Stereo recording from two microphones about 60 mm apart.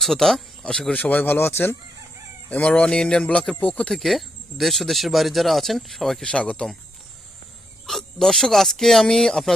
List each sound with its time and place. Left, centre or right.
0.0 s speech: centre
0.9 s speech: left
2.5 s speech: left
3.8 s speech: centre
6.2 s speech: centre
7.9 s speech: centre